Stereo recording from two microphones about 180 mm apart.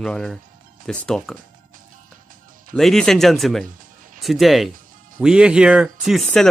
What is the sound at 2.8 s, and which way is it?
Speech, centre (ahead or behind).